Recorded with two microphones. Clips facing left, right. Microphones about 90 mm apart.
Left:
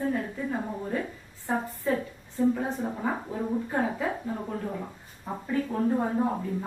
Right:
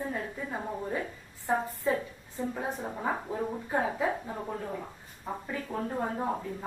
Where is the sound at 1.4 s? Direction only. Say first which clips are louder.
Even; 15° right (ahead or behind).